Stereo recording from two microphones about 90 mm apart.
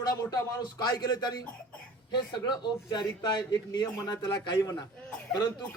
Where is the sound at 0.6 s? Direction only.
50° left (ahead or behind).